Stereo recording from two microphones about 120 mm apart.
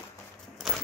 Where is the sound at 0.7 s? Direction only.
5° right (ahead or behind).